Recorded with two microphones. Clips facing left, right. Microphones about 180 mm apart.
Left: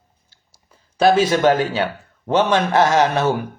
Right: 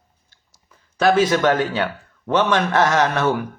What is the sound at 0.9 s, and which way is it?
Speech, 30° left (ahead or behind).